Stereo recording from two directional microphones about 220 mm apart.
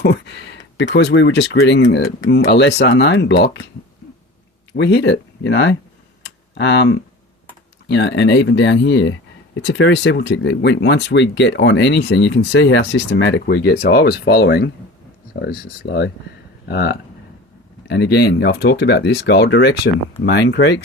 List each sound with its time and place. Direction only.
0.0 s speech: 50° left (ahead or behind)
4.7 s speech: 50° left (ahead or behind)
6.2 s computer keyboard: 55° left (ahead or behind)
7.9 s speech: 55° left (ahead or behind)